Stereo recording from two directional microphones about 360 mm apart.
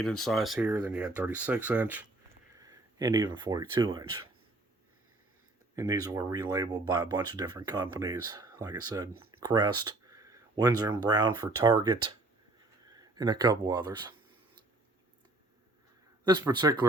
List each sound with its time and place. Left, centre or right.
0.2 s speech: centre
5.7 s speech: centre
9.1 s a sound: right
9.4 s speech: centre
16.2 s speech: centre